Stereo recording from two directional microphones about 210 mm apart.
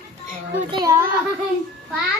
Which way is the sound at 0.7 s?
15° right (ahead or behind).